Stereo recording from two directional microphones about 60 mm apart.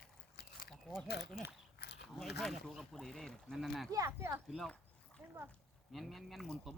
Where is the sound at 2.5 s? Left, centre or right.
Centre.